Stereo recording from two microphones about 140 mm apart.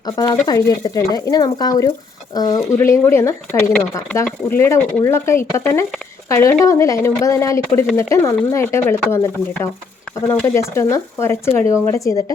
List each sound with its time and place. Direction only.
0.0 s speech: 30° left (ahead or behind)
2.7 s speech: 20° left (ahead or behind)